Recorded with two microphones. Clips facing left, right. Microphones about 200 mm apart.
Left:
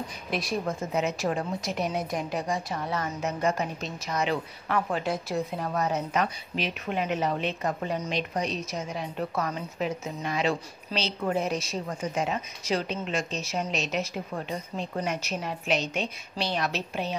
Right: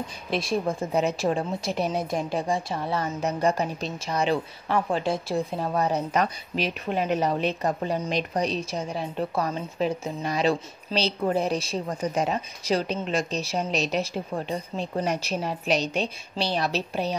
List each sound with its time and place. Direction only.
0.3 s a woman's voice: 30° right (ahead or behind)